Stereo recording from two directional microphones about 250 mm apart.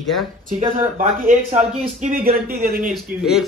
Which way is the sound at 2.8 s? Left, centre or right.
Centre.